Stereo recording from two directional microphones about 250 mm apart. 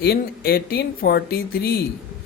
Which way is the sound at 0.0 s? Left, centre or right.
Left.